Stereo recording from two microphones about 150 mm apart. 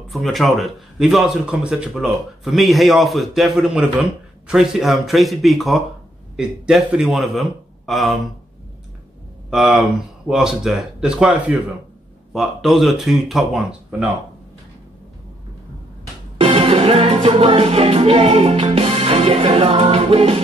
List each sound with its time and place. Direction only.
0.1 s a man's voice: centre (ahead or behind)
9.5 s a man's voice: centre (ahead or behind)
16.3 s music: 40° right (ahead or behind)